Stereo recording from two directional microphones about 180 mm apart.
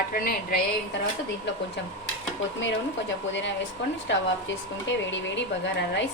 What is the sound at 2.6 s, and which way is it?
A woman's voice, 90° left.